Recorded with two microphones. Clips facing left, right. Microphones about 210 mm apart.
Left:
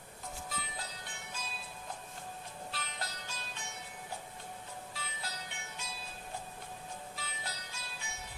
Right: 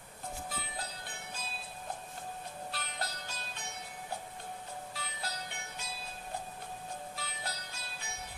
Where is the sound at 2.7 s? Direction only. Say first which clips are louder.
Right 2 dB; 35° right (ahead or behind).